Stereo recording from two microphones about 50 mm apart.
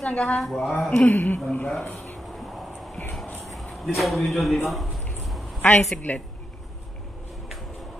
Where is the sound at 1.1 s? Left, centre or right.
Left.